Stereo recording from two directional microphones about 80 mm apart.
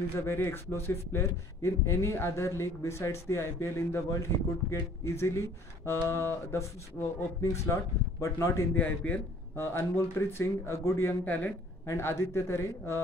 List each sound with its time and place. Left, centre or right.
0.2 s a man's voice: left
8.7 s a man's voice: left
9.6 s a man's voice: left
11.2 s a man's voice: left
11.8 s a man's voice: left